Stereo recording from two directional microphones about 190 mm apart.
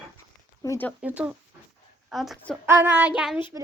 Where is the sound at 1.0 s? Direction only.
5° right (ahead or behind).